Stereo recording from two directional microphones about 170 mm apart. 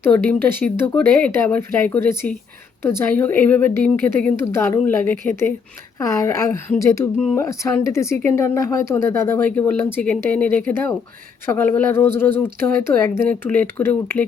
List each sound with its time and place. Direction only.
0.0 s speech: 10° left (ahead or behind)